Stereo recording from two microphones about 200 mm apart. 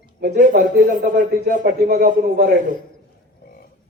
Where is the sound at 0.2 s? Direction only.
50° right (ahead or behind).